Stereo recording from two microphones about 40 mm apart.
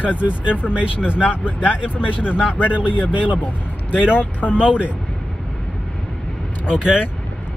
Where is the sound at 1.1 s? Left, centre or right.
Left.